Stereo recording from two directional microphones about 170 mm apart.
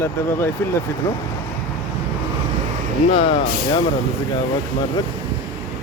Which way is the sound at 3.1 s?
35° left (ahead or behind).